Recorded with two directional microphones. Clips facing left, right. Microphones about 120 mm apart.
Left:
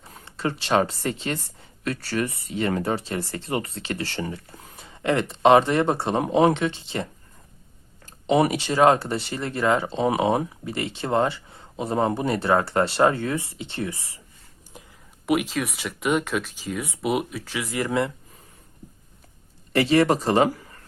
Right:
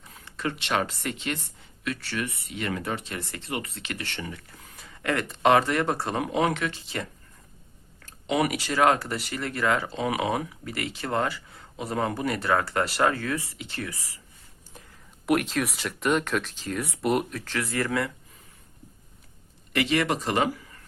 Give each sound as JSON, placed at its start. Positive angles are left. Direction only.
{"t": 0.0, "sound": "speech", "side_deg": 30}
{"t": 8.3, "sound": "speech", "side_deg": 30}
{"t": 15.3, "sound": "speech", "side_deg": 0}
{"t": 17.7, "sound": "speech", "side_deg": 15}
{"t": 19.7, "sound": "speech", "side_deg": 35}